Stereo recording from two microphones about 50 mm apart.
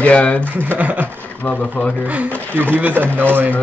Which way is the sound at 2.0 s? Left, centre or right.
Right.